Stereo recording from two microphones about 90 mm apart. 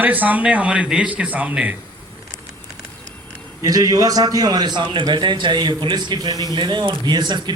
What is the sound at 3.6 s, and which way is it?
A man's voice, 45° right (ahead or behind).